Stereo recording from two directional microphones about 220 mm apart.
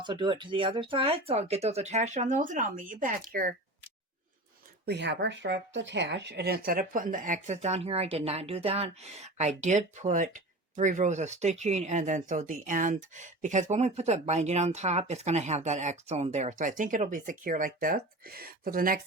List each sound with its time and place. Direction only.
0.0 s speech: 20° right (ahead or behind); by 3.2 s 40° right (ahead or behind)
4.9 s speech: 50° right (ahead or behind)